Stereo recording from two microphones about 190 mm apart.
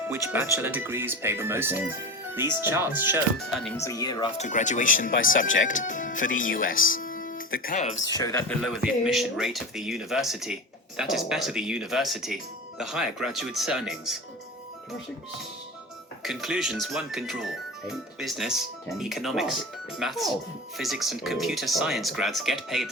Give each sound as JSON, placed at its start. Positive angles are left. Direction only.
{"t": 0.1, "sound": "speech", "side_deg": -15}
{"t": 3.3, "sound": "speech", "side_deg": 0}
{"t": 3.8, "sound": "speech", "side_deg": 15}
{"t": 4.4, "sound": "speech", "side_deg": 40}
{"t": 8.0, "sound": "speech", "side_deg": 20}
{"t": 8.4, "sound": "speech", "side_deg": 0}
{"t": 16.2, "sound": "speech", "side_deg": 0}